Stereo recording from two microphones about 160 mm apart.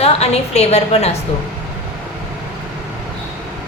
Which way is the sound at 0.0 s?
40° left (ahead or behind).